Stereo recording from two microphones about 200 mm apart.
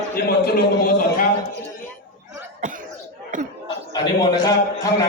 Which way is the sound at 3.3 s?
40° right (ahead or behind).